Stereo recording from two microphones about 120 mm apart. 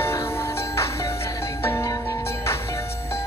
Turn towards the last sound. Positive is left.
turn(degrees=20)  # may be behind; listen again after turning